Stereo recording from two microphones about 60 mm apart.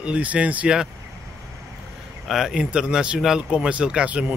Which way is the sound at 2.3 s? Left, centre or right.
Centre.